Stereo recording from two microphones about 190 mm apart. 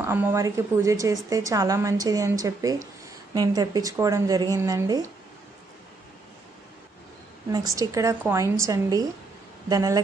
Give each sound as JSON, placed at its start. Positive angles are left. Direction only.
{"t": 0.0, "sound": "a woman's voice", "side_deg": -15}
{"t": 7.5, "sound": "a woman's voice", "side_deg": -20}